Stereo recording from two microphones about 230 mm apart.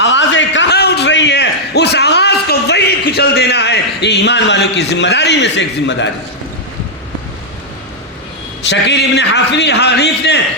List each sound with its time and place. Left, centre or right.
0.0 s a sound: left
5.5 s a man's voice: left
8.6 s a man's voice: left